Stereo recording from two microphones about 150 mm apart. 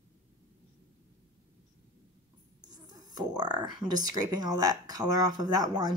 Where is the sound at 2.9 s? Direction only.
30° right (ahead or behind).